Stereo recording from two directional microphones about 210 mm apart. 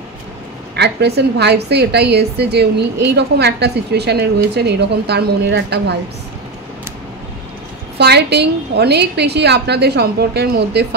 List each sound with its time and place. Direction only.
0.7 s a woman's voice: 55° right (ahead or behind)
8.0 s a woman's voice: 50° right (ahead or behind)